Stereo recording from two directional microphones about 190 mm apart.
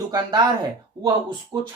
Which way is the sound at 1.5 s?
20° right (ahead or behind).